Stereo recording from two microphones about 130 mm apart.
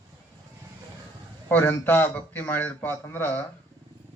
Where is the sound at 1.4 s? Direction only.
15° left (ahead or behind).